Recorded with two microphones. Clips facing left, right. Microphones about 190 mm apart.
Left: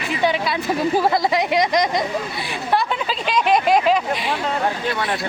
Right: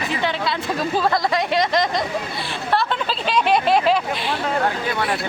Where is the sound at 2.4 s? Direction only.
Centre (ahead or behind).